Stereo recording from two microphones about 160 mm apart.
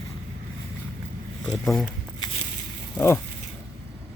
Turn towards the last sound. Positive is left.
turn(degrees=15)  # may be behind; listen again after turning